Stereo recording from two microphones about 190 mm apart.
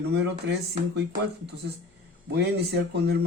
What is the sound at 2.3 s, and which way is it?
Speech, 60° right (ahead or behind).